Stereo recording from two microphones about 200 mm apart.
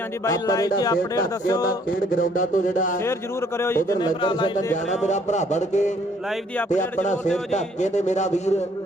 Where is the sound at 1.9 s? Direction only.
45° left (ahead or behind).